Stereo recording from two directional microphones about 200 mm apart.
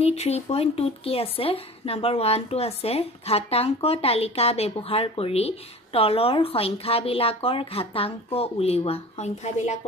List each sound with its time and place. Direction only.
0.0 s speech: 30° left (ahead or behind)